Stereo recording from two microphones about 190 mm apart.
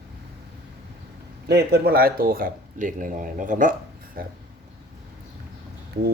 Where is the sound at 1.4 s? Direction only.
60° right (ahead or behind).